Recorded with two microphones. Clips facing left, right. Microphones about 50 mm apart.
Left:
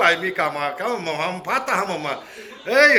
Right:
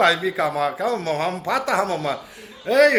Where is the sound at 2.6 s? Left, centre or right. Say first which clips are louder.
Left 1 dB; left.